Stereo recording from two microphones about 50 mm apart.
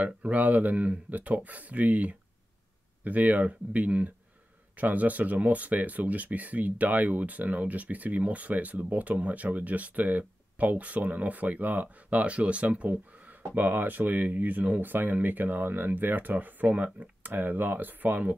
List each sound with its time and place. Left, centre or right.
0.0 s speech: right
13.6 s speech: right